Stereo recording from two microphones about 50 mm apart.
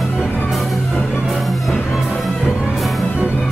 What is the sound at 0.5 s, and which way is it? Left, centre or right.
Music, centre.